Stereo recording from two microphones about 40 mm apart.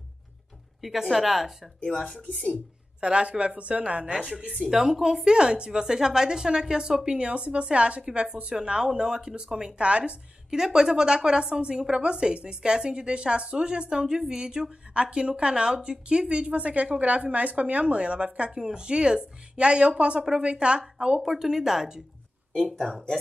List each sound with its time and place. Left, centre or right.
0.7 s speech: centre
2.5 s a woman's voice: right
4.6 s a woman's voice: centre; by 10.1 s right
10.5 s a woman's voice: centre
15.0 s a woman's voice: right
18.6 s a woman's voice: centre
21.2 s a woman's voice: centre
22.5 s speech: centre